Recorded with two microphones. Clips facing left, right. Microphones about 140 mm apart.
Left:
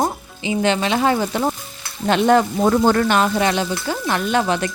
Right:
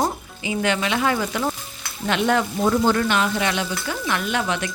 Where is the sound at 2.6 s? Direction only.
50° left (ahead or behind).